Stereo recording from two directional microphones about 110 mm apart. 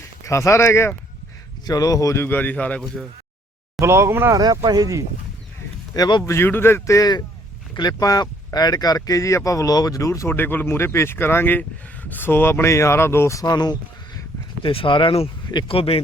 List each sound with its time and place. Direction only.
0.3 s speech: 25° left (ahead or behind)
2.2 s a man's voice: 15° left (ahead or behind)
3.8 s speech: 25° right (ahead or behind)
4.4 s speech: 35° right (ahead or behind)
5.9 s speech: 40° left (ahead or behind)
6.2 s speech: 20° left (ahead or behind)
14.6 s speech: 55° left (ahead or behind)